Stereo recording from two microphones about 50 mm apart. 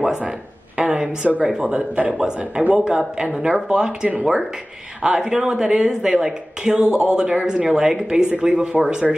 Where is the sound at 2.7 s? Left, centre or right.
Centre.